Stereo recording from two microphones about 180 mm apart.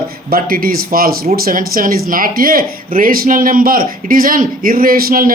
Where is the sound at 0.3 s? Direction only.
55° right (ahead or behind).